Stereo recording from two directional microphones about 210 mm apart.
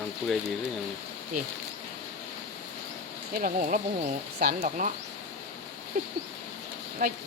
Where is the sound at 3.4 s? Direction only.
40° right (ahead or behind).